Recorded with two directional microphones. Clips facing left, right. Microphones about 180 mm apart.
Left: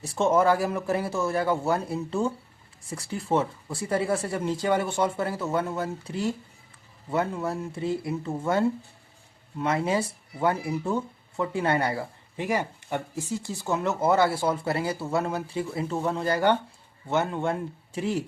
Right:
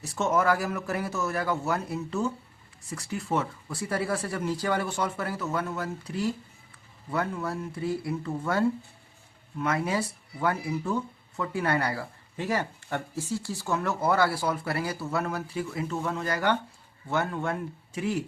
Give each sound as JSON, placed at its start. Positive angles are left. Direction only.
{"t": 0.0, "sound": "speech", "side_deg": 30}